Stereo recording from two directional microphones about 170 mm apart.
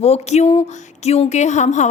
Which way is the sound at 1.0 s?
40° left (ahead or behind).